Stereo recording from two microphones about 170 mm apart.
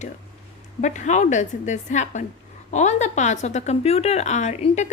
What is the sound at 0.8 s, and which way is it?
A woman's voice, 45° left (ahead or behind).